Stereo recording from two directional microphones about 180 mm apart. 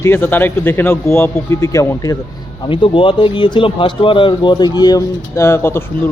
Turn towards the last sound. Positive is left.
turn(degrees=10)  # may be behind; listen again after turning